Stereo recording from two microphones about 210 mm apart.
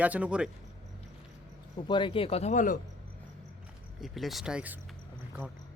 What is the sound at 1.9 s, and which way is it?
Speech, 25° left (ahead or behind).